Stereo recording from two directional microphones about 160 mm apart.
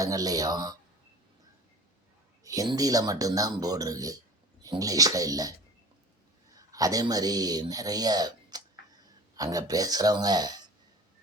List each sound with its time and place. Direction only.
0.0 s speech: 20° right (ahead or behind)
2.4 s speech: 20° right (ahead or behind)
6.6 s speech: 20° right (ahead or behind)